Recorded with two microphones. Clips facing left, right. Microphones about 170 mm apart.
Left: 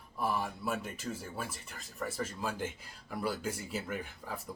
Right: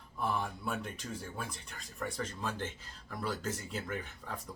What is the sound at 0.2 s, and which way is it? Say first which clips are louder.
Speech: left 1 dB; 5° left (ahead or behind).